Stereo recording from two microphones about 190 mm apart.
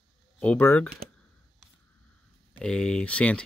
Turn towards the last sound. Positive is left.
turn(degrees=5)  # may be behind; listen again after turning